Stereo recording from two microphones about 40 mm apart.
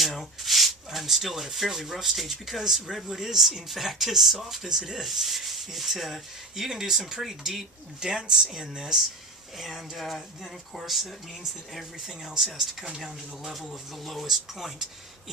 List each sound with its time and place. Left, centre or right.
0.0 s rub: centre
1.5 s speech: centre
9.6 s speech: centre
12.0 s speech: centre